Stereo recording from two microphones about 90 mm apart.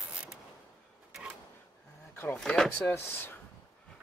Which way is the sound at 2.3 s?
5° left (ahead or behind).